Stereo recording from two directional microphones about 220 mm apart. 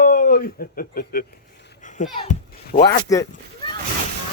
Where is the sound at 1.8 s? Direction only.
35° left (ahead or behind).